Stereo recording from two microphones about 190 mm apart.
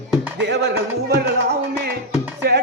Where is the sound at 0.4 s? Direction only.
65° right (ahead or behind).